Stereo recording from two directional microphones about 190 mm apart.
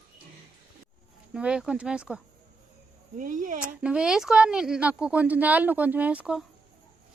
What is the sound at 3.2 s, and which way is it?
Speech, 45° right (ahead or behind).